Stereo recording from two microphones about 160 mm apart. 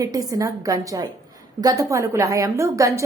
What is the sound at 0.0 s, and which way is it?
A woman's voice, 25° right (ahead or behind).